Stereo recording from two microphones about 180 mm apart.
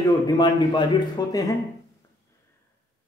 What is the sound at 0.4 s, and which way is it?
A man's voice, 25° left (ahead or behind).